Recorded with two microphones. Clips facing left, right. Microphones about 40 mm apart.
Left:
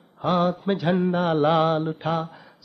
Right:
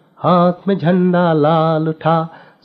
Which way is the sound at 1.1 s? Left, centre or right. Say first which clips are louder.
Right 9 dB; right.